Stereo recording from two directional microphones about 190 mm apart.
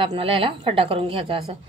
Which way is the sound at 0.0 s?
30° right (ahead or behind).